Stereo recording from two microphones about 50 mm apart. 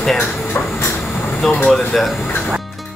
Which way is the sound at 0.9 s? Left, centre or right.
Centre.